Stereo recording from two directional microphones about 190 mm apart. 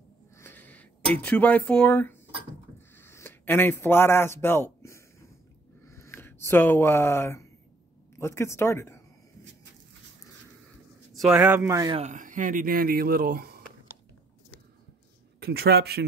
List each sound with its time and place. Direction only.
0.4 s a sound: 10° left (ahead or behind)
1.1 s speech: 10° left (ahead or behind)
3.0 s a sound: 10° left (ahead or behind)
8.2 s speech: 15° left (ahead or behind)
11.1 s a man's voice: 5° right (ahead or behind)
11.9 s speech: 35° right (ahead or behind)
15.4 s speech: 55° right (ahead or behind)